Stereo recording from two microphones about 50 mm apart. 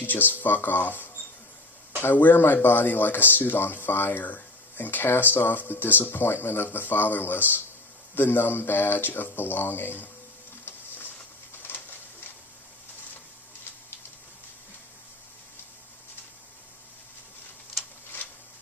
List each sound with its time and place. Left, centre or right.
0.0 s speech: left
10.7 s printer: left
11.5 s a sound: left